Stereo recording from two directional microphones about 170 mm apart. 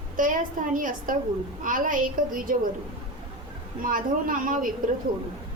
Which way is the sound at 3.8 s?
55° right (ahead or behind).